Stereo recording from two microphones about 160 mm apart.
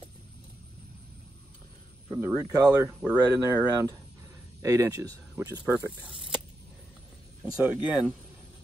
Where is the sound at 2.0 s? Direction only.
20° right (ahead or behind).